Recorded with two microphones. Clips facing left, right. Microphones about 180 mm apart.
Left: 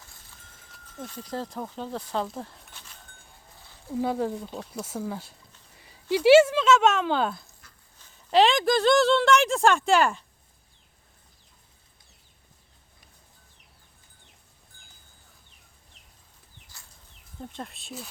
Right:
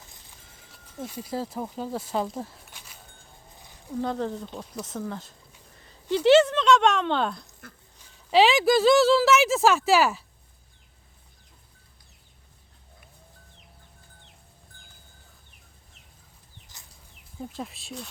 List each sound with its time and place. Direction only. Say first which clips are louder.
0.9 s speech: right 2 dB; 10° right (ahead or behind)
2.7 s a sound: right 1 dB; 10° right (ahead or behind)
3.9 s speech: left 2 dB; 10° left (ahead or behind)
16.7 s chicken: even; 20° right (ahead or behind)
17.3 s speech: right 3 dB; 5° right (ahead or behind)